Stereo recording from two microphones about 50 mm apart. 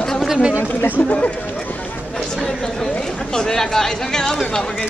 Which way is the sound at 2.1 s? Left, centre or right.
Centre.